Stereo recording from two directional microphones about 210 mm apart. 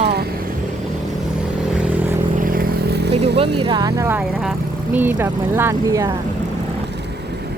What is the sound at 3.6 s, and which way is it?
Speech, 20° right (ahead or behind).